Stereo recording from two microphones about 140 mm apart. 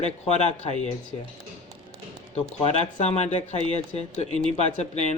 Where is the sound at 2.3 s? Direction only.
45° left (ahead or behind).